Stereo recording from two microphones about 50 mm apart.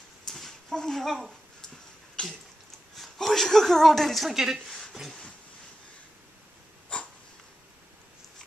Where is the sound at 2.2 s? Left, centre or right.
Centre.